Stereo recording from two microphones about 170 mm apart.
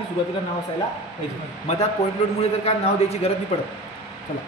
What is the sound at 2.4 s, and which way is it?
Speech, 40° left (ahead or behind).